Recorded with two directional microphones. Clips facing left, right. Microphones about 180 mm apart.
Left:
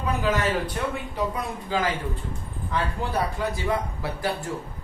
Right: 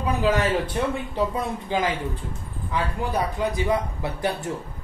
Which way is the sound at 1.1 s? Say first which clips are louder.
Right 3 dB; 25° right (ahead or behind).